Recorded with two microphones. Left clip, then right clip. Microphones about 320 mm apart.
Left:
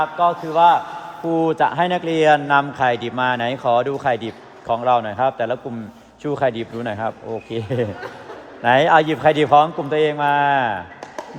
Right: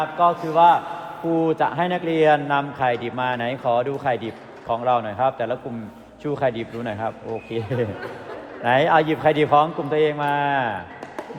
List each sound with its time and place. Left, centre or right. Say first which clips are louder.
0.0 s a man's voice: left 1 dB; left